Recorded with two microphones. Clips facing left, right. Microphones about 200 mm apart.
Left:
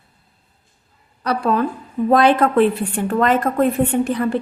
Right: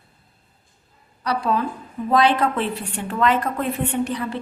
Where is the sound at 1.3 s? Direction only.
55° left (ahead or behind).